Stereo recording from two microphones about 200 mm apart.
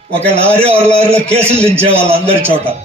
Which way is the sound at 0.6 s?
30° right (ahead or behind).